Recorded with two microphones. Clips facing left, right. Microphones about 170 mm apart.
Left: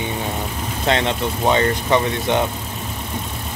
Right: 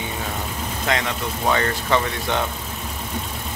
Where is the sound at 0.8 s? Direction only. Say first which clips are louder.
Left 5 dB; 30° left (ahead or behind).